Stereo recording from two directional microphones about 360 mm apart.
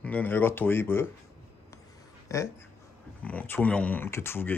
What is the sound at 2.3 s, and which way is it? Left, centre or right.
Speech, centre.